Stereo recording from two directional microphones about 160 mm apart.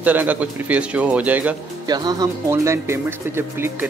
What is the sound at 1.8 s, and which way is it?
A man's voice, 25° right (ahead or behind).